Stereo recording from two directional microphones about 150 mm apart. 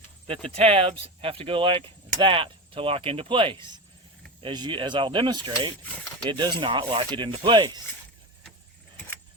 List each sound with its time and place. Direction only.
0.3 s speech: 40° right (ahead or behind)